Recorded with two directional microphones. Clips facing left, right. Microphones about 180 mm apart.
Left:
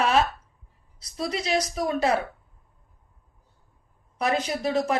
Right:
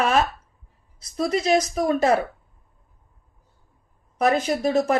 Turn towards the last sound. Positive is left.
turn(degrees=-50)  # may be behind; listen again after turning